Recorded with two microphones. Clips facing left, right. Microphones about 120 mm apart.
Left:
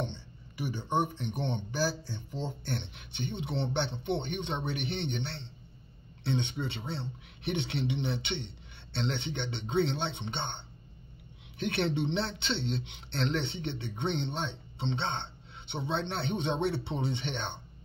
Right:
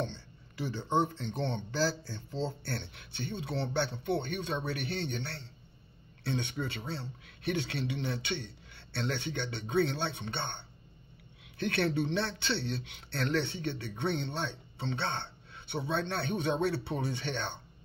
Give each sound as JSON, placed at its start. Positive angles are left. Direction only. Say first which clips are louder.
{"t": 0.0, "sound": "speech", "louder": "even", "side_deg": 15}